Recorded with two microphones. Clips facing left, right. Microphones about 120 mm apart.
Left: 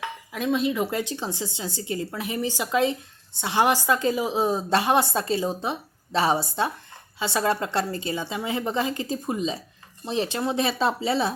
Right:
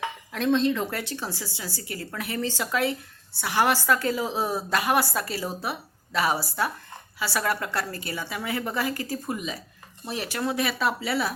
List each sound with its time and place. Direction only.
0.3 s a woman's voice: 5° left (ahead or behind); by 11.3 s 25° left (ahead or behind)